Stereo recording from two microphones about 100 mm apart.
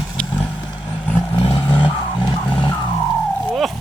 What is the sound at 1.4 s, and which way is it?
Vehicle, 60° left (ahead or behind).